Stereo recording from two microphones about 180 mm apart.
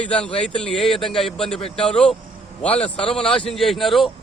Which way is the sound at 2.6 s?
30° left (ahead or behind).